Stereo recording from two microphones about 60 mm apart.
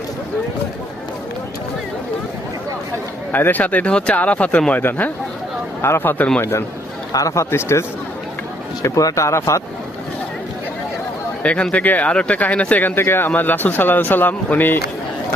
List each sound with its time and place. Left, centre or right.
3.3 s speech: left
6.4 s speech: left
7.1 s speech: left
7.5 s speech: left
8.8 s speech: left
11.4 s speech: centre